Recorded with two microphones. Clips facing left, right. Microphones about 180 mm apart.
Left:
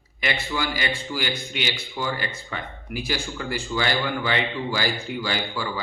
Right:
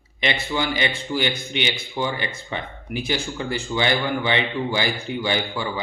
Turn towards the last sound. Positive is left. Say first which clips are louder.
# right 3 dB
turn(degrees=-20)  # may be behind; listen again after turning